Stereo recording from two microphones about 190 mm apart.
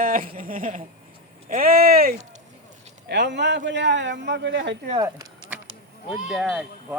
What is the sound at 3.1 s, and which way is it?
A man's voice, 65° right (ahead or behind).